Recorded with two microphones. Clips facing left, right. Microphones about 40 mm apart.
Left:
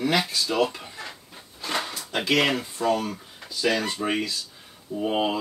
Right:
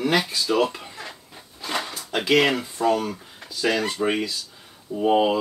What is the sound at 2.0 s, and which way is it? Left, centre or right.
Speech, centre.